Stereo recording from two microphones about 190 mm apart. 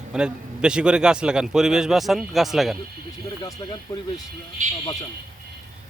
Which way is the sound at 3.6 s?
15° left (ahead or behind).